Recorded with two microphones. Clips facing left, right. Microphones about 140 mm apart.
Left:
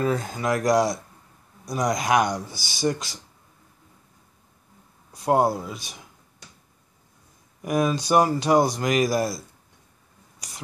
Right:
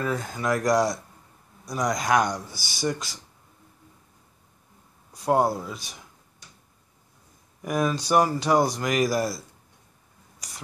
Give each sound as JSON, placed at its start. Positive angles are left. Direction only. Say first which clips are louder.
{"t": 0.0, "sound": "speech", "louder": "left 3 dB", "side_deg": 20}
{"t": 5.2, "sound": "speech", "louder": "left 1 dB", "side_deg": 15}
{"t": 7.6, "sound": "speech", "louder": "left 2 dB", "side_deg": 15}